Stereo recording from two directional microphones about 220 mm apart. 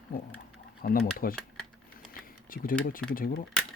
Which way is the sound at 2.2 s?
40° left (ahead or behind).